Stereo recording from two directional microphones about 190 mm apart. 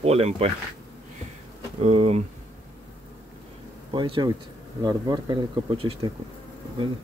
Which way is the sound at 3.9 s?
25° right (ahead or behind).